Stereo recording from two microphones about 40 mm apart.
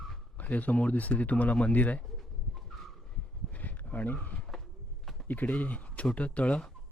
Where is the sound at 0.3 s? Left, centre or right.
Left.